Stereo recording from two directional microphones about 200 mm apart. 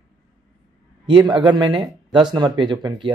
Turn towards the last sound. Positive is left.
turn(degrees=-25)  # may be behind; listen again after turning